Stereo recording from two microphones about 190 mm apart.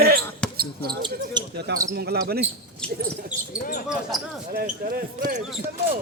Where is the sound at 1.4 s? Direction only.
25° right (ahead or behind).